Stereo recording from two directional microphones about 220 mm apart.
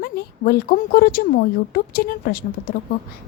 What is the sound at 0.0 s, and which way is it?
A woman's voice, 45° left (ahead or behind).